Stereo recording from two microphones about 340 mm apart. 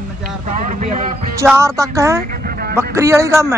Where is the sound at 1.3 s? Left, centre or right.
Centre.